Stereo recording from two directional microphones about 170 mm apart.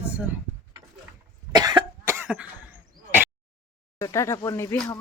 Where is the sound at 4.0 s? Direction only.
15° left (ahead or behind).